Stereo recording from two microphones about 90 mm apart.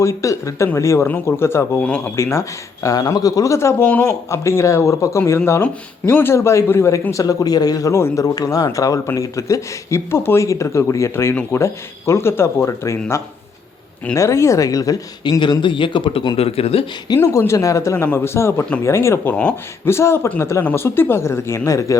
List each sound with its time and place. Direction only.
0.0 s speech: 35° left (ahead or behind)
1.8 s speech: 15° left (ahead or behind)
2.1 s speech: 30° left (ahead or behind)
7.9 s speech: 30° left (ahead or behind)
14.2 s speech: 35° left (ahead or behind); by 16.2 s 65° left (ahead or behind)
16.4 s speech: 90° left
17.2 s speech: 30° left (ahead or behind)